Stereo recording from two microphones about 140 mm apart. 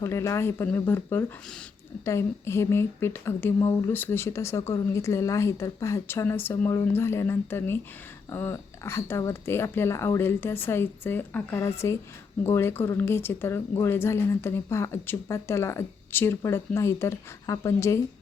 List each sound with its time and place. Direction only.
0.0 s speech: 20° left (ahead or behind)